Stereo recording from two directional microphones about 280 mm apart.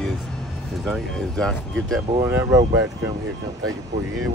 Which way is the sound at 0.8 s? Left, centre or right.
Centre.